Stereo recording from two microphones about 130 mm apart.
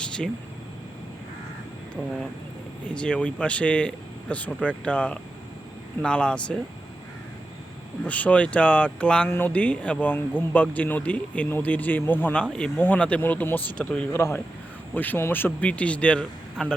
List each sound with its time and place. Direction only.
2.8 s speech: 10° left (ahead or behind)
8.0 s speech: 10° left (ahead or behind)
14.1 s a man's voice: 20° left (ahead or behind)